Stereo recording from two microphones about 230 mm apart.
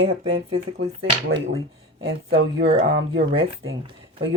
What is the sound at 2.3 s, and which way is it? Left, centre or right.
Speech, right.